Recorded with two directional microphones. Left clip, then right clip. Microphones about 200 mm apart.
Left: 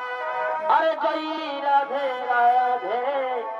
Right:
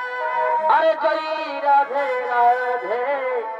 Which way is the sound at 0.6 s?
5° left (ahead or behind).